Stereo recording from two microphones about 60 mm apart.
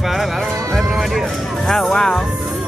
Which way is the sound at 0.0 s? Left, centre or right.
Centre.